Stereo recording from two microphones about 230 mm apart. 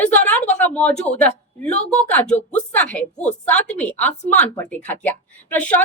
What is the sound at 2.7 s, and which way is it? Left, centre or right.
A woman's voice, centre.